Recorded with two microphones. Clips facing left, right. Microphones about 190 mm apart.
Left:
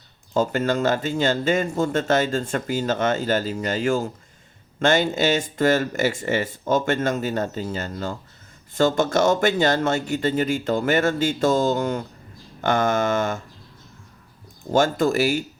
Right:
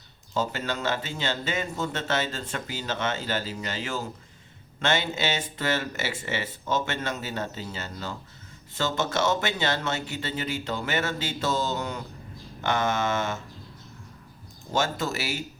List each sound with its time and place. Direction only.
0.3 s speech: 50° left (ahead or behind)
14.7 s speech: 50° left (ahead or behind)